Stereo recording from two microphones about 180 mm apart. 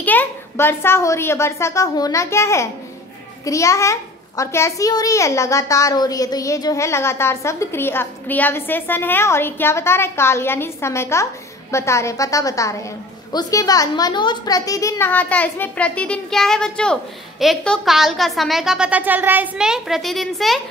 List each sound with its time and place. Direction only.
0.0 s a woman's voice: 10° left (ahead or behind)